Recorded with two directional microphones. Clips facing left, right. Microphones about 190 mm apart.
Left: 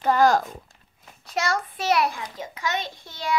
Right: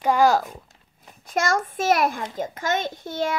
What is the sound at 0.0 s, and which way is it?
Speech, 10° right (ahead or behind).